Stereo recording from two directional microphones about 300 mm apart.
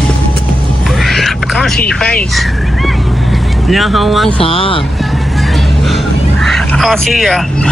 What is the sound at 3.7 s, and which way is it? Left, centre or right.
Speech, centre.